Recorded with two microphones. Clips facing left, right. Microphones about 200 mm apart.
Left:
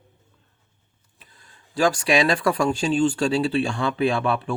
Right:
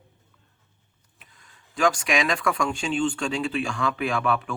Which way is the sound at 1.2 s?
35° left (ahead or behind).